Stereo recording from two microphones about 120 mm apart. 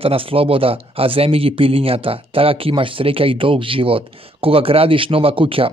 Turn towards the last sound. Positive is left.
turn(degrees=-50)  # may be behind; listen again after turning